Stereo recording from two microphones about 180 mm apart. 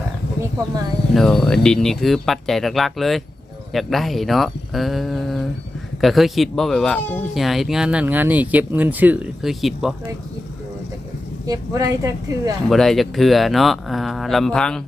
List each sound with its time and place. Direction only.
1.1 s speech: centre (ahead or behind)
11.4 s speech: 20° right (ahead or behind)
12.6 s speech: centre (ahead or behind)